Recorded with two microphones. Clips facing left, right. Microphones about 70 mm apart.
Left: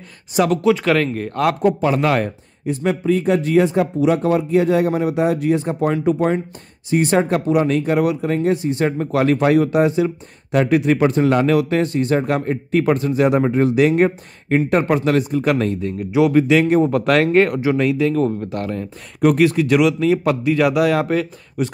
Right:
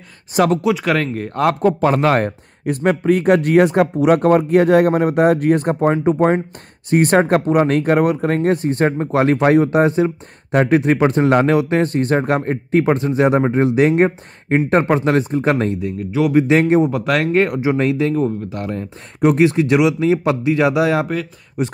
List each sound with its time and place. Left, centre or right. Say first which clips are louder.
0.7 s speech: left 1 dB; centre
1.5 s speech: right 2 dB; right
2.6 s speech: right 3 dB; right
5.8 s speech: right 3 dB; right
6.9 s speech: right 3 dB; right
8.9 s speech: right 1 dB; right
16.8 s speech: left 2 dB; centre
17.7 s speech: even; right
18.1 s speech: even; centre